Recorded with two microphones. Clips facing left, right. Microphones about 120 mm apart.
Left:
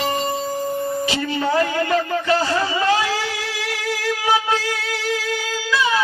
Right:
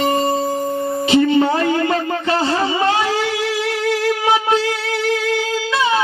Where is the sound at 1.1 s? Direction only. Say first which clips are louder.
Right 9 dB; 25° right (ahead or behind).